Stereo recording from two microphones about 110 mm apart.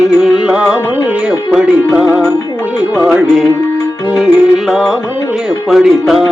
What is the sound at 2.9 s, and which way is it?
Music, 5° right (ahead or behind).